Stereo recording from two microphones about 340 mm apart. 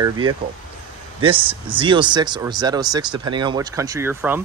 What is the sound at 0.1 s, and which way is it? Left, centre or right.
Speech, right.